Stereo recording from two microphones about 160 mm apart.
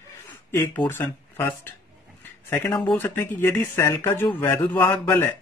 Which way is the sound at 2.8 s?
10° left (ahead or behind).